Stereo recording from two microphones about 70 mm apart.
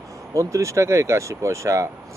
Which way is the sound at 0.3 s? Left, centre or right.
Right.